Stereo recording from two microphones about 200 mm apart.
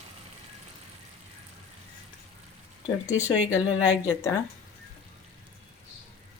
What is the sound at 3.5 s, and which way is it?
Speech, 15° left (ahead or behind).